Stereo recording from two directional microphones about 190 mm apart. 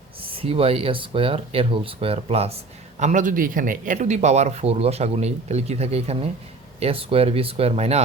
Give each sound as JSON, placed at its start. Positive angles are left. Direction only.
{"t": 0.3, "sound": "speech", "side_deg": -30}